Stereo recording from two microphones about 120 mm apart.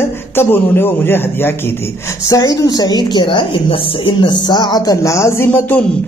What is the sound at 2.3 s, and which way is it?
A woman's voice, 30° left (ahead or behind).